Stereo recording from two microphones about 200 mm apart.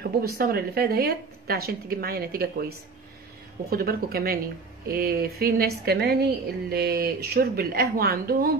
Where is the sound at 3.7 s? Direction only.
50° right (ahead or behind).